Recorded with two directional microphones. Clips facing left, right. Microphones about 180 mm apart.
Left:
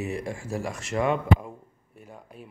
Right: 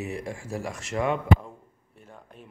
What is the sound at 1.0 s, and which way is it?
Speech, 45° left (ahead or behind).